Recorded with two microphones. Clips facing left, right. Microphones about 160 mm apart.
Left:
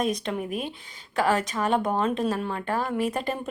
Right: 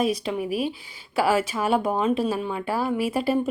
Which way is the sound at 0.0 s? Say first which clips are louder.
Right 3 dB; 5° right (ahead or behind).